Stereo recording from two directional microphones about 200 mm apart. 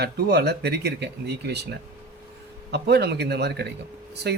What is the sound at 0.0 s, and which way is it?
Speech, 55° right (ahead or behind).